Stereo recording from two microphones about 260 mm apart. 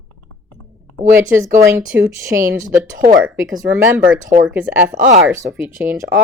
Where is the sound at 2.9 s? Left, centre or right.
Right.